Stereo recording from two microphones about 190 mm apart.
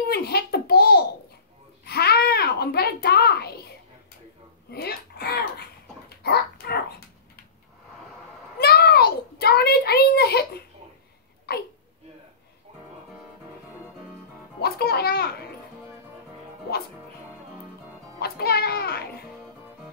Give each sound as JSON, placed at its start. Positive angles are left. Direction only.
{"t": 0.1, "sound": "a sound", "side_deg": 55}
{"t": 4.6, "sound": "dog", "side_deg": 60}
{"t": 8.5, "sound": "a sound", "side_deg": 55}
{"t": 11.5, "sound": "hiccup", "side_deg": 55}
{"t": 14.6, "sound": "music", "side_deg": 55}
{"t": 18.2, "sound": "music", "side_deg": 55}